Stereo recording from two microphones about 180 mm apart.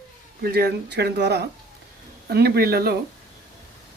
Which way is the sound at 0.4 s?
65° right (ahead or behind).